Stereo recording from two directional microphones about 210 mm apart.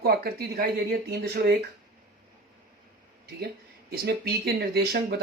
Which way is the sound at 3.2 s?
50° right (ahead or behind).